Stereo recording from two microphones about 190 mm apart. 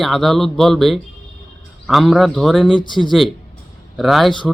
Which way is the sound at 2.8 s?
25° left (ahead or behind).